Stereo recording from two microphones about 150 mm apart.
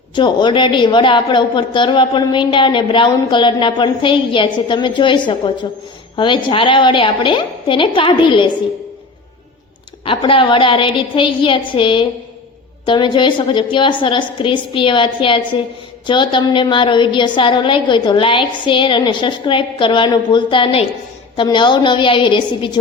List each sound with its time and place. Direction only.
0.2 s a woman's voice: 30° left (ahead or behind)
10.1 s a woman's voice: 35° left (ahead or behind)